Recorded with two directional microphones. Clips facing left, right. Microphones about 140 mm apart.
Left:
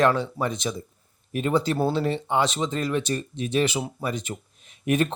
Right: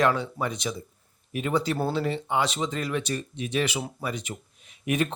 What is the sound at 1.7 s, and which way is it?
Speech, 30° left (ahead or behind).